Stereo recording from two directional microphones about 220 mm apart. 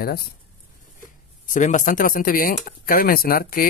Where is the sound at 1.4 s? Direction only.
35° left (ahead or behind).